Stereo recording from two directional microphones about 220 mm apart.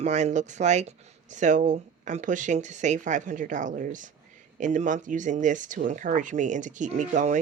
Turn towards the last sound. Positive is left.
turn(degrees=-35)  # may be behind; listen again after turning